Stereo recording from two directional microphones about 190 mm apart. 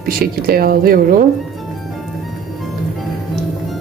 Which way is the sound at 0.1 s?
50° right (ahead or behind).